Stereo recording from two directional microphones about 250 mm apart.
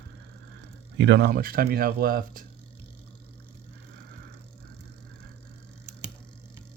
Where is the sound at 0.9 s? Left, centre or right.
Right.